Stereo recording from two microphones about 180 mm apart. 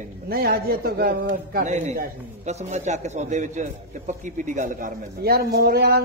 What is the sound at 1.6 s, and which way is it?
A man's voice, 40° right (ahead or behind).